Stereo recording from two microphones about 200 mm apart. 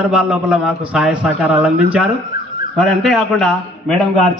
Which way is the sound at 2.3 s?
50° left (ahead or behind).